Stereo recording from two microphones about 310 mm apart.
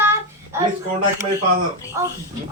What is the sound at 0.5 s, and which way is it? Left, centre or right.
Speech, centre.